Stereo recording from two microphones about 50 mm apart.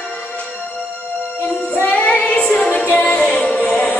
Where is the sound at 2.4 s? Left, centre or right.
Centre.